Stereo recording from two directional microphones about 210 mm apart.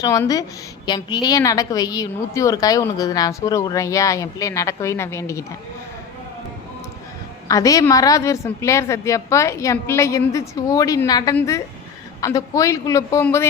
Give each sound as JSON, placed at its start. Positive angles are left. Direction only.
{"t": 0.0, "sound": "a woman's voice", "side_deg": 15}
{"t": 7.4, "sound": "a woman's voice", "side_deg": 15}